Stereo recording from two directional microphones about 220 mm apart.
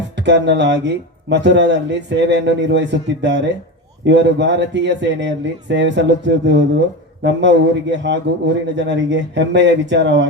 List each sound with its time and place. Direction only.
0.2 s speech: 55° right (ahead or behind)